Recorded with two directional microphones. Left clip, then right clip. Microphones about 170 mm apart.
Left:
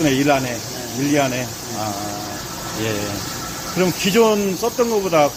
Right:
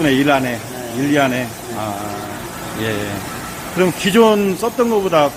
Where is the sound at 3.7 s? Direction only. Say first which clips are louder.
Right 3 dB; 15° right (ahead or behind).